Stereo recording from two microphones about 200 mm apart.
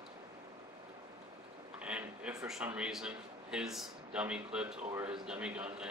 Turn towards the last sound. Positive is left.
turn(degrees=-5)  # may be behind; listen again after turning